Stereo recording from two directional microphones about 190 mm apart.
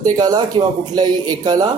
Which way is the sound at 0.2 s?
20° right (ahead or behind).